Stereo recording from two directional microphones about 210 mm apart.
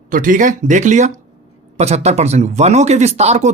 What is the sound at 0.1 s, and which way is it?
Speech, 40° right (ahead or behind).